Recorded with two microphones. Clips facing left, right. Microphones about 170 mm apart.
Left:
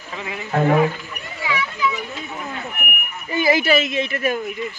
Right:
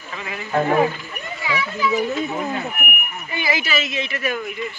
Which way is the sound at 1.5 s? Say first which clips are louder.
Right 2 dB; 40° right (ahead or behind).